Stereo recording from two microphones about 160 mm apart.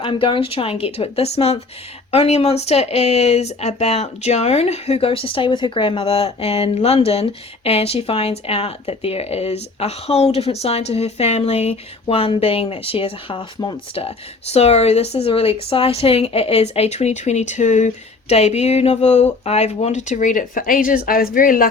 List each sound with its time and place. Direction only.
0.0 s speech: 30° left (ahead or behind)
14.5 s speech: 40° left (ahead or behind); by 21.7 s 60° left (ahead or behind)